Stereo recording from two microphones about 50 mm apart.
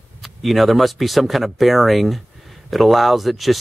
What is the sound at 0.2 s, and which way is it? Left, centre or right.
Speech, centre.